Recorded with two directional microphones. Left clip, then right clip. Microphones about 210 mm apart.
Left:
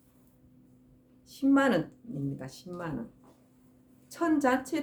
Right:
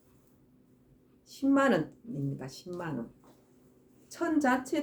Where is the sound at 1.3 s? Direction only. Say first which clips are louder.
Left 1 dB; 15° left (ahead or behind).